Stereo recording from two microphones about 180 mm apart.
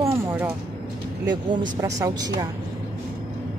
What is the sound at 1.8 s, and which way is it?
Speech, 20° right (ahead or behind).